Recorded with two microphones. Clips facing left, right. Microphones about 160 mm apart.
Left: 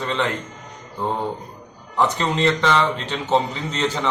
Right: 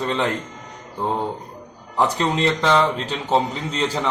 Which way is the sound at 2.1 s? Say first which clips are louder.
Even; 5° right (ahead or behind).